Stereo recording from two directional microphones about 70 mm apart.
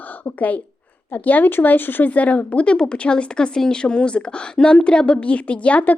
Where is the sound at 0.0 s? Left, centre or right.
Left.